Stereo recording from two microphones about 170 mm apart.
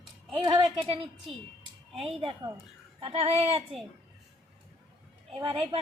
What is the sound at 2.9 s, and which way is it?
Speech, 30° right (ahead or behind).